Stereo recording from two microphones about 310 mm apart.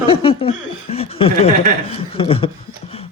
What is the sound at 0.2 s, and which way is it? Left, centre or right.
Chuckle, centre.